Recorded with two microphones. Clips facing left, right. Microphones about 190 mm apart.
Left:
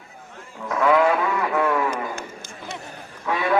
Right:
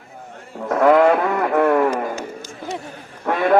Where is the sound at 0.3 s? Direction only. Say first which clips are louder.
Right 6 dB; 45° right (ahead or behind).